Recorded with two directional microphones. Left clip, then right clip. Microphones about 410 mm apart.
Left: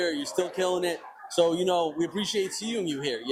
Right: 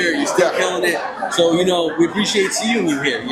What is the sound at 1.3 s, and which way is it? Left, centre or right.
Speech, left.